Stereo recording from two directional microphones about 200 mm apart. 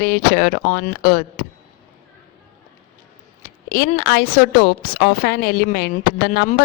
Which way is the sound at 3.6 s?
50° left (ahead or behind).